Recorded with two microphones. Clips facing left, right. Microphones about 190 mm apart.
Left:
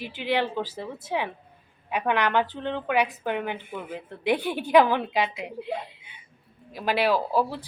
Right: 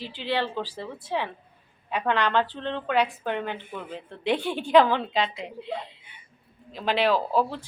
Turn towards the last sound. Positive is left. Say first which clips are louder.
# even
turn(degrees=10)  # may be behind; listen again after turning